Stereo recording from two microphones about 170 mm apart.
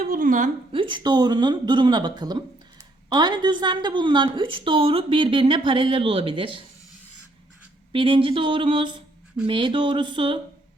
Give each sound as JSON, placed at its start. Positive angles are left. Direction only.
{"t": 0.0, "sound": "a woman's voice", "side_deg": -50}
{"t": 0.7, "sound": "speech", "side_deg": -30}
{"t": 7.9, "sound": "speech", "side_deg": -30}